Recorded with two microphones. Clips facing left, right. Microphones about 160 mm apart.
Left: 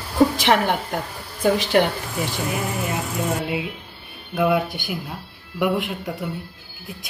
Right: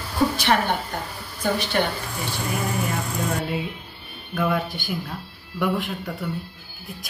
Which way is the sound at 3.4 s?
15° left (ahead or behind).